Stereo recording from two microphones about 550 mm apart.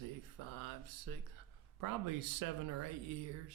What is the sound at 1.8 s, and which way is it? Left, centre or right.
Speech, right.